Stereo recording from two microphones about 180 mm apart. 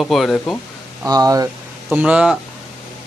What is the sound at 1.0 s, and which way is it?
Speech, 20° right (ahead or behind).